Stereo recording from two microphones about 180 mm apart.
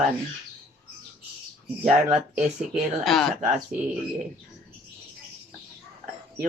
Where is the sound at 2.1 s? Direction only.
5° right (ahead or behind).